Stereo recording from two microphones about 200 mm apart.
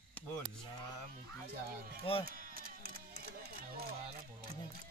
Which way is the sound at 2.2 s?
45° right (ahead or behind).